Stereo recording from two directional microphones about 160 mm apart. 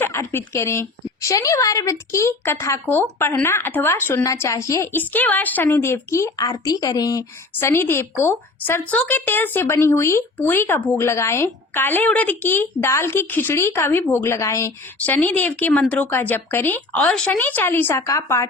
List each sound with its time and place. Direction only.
0.0 s a woman's voice: 15° left (ahead or behind)